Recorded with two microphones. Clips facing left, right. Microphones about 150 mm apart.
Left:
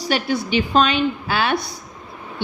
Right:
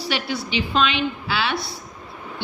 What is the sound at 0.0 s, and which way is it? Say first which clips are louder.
A woman's voice: left 5 dB; 45° left (ahead or behind).